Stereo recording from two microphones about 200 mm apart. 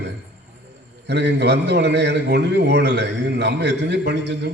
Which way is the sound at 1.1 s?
60° right (ahead or behind).